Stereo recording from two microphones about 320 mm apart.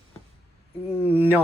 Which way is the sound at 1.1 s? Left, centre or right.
Centre.